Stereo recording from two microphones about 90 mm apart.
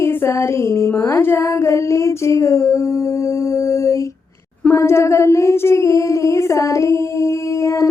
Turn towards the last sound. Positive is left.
turn(degrees=35)  # may be behind; listen again after turning